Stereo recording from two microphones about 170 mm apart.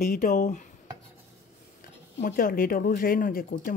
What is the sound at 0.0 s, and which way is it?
Speech, 60° left (ahead or behind).